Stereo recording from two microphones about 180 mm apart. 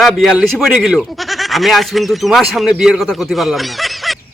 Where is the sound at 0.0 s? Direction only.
Centre (ahead or behind).